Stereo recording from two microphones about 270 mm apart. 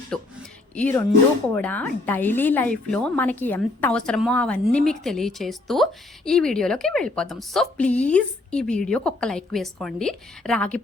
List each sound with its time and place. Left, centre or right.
0.1 s a woman's voice: centre